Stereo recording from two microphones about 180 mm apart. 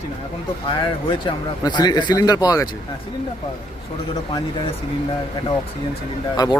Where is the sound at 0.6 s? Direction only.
25° left (ahead or behind).